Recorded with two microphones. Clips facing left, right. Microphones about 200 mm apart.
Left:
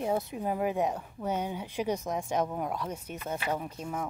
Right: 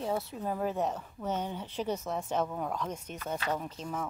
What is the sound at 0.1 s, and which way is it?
A woman's voice, 15° left (ahead or behind).